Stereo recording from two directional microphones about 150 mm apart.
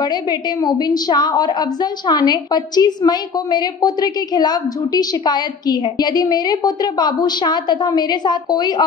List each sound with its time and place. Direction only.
0.0 s a woman's voice: 25° left (ahead or behind)